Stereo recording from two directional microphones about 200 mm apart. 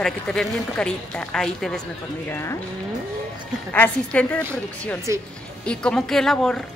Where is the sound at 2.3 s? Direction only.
15° left (ahead or behind).